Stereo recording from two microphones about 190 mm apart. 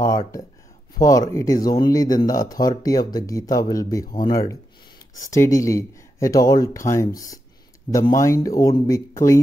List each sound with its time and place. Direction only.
0.0 s speech: 20° left (ahead or behind)